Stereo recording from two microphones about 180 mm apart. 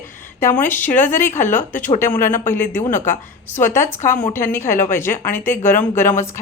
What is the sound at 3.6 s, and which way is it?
A woman's voice, 15° left (ahead or behind).